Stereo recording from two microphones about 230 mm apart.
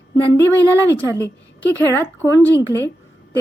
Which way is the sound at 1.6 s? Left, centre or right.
Centre.